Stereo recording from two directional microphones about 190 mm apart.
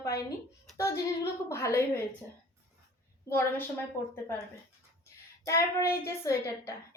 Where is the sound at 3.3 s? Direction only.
15° left (ahead or behind).